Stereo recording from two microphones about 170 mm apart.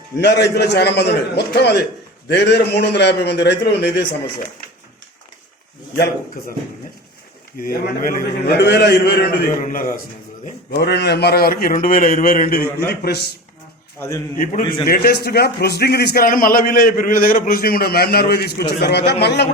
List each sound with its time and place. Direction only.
0.2 s a man's voice: 90° left
7.6 s a man's voice: 55° left (ahead or behind)
8.5 s a man's voice: 75° left (ahead or behind); by 10.0 s 50° left (ahead or behind)
10.7 s a man's voice: 75° left (ahead or behind)
14.3 s a man's voice: 50° left (ahead or behind)
14.8 s a man's voice: 60° left (ahead or behind)